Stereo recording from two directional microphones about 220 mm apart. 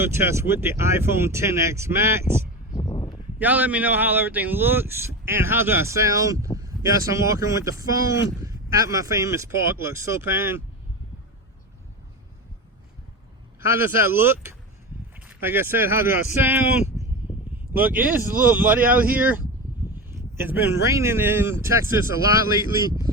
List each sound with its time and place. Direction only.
0.0 s speech: 10° right (ahead or behind)
2.7 s a sound: 20° left (ahead or behind)
3.3 s speech: 5° right (ahead or behind)
13.7 s speech: 10° right (ahead or behind)